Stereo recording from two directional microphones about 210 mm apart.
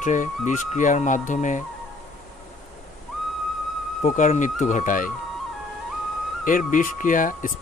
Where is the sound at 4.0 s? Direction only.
35° left (ahead or behind).